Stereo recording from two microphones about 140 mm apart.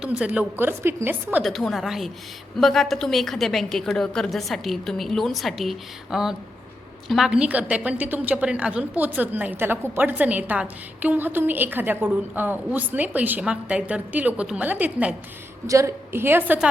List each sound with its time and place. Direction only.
0.0 s a woman's voice: 10° right (ahead or behind)
1.5 s a woman's voice: centre (ahead or behind)
15.6 s a woman's voice: 20° right (ahead or behind)